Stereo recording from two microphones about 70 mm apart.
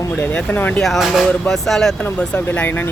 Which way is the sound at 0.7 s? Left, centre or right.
Centre.